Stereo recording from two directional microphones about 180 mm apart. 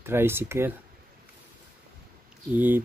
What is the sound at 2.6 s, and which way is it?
Speech, 10° right (ahead or behind).